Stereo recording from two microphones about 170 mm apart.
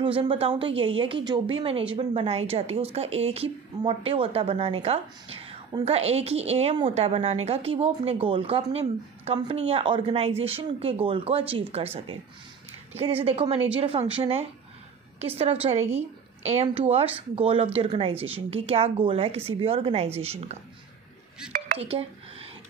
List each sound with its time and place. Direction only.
0.0 s a woman's voice: 30° right (ahead or behind)
21.5 s telephone dialing: 55° right (ahead or behind)
21.7 s a woman's voice: 35° right (ahead or behind)